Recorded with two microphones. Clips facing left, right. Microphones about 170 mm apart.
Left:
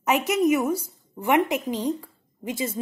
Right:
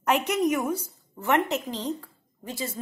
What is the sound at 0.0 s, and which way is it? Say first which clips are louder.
A woman's voice: left 2 dB; 5° left (ahead or behind).